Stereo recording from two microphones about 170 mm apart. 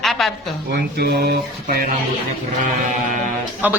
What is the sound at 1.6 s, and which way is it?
Speech, 55° right (ahead or behind).